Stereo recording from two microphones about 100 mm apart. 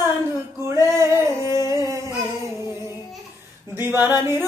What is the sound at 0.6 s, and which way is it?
Male singing, 30° right (ahead or behind).